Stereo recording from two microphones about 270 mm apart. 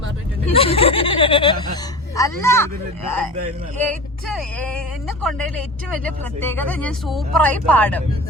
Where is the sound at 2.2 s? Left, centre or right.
Centre.